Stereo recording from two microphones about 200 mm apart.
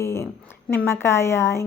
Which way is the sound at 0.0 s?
15° left (ahead or behind).